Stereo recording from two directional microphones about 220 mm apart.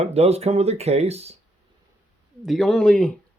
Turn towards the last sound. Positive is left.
turn(degrees=5)  # may be behind; listen again after turning